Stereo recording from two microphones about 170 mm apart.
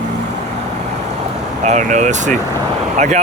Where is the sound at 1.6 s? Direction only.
45° right (ahead or behind).